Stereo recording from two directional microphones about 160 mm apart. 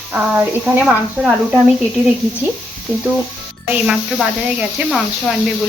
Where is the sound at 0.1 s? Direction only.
5° right (ahead or behind).